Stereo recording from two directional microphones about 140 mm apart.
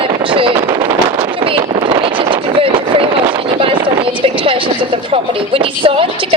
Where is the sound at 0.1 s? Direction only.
40° right (ahead or behind).